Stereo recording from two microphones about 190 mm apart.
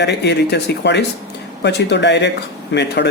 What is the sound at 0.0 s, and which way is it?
Speech, 65° left (ahead or behind).